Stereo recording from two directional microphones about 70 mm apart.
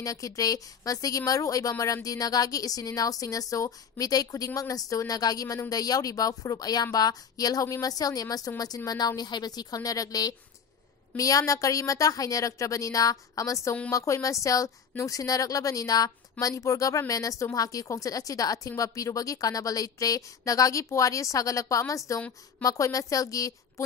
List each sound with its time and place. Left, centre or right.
0.0 s a woman's voice: left